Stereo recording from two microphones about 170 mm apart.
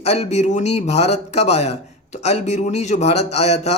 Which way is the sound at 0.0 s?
40° left (ahead or behind).